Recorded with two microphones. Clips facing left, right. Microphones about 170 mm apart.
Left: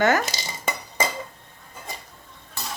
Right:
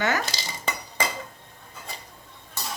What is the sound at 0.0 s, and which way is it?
Speech, 50° left (ahead or behind).